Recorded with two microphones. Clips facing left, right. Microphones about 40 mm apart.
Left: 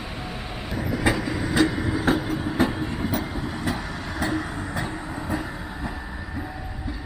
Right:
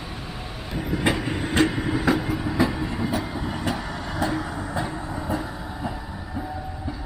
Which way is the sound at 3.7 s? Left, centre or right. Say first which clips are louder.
Right 1 dB; centre.